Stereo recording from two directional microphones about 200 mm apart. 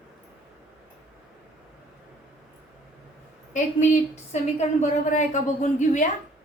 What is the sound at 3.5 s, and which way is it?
Speech, 35° left (ahead or behind).